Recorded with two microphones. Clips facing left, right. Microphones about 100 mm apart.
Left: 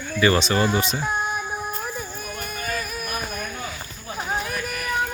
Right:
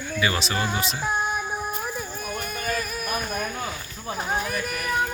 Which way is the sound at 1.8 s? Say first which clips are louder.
Even; centre (ahead or behind).